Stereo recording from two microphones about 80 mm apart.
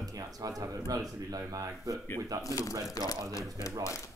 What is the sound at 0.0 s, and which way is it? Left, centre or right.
Speech, right.